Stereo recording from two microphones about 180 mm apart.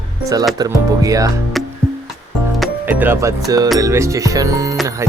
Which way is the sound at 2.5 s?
10° right (ahead or behind).